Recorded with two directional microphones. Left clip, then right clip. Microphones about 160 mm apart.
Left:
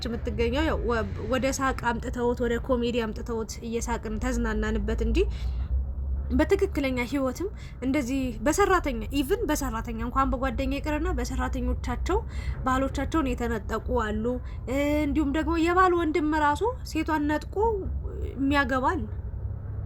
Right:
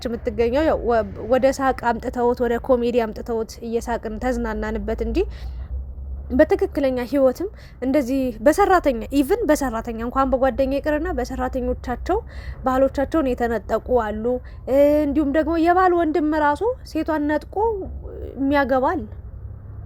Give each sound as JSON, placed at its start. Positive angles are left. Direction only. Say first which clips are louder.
{"t": 0.0, "sound": "a woman's voice", "louder": "right 7 dB", "side_deg": -50}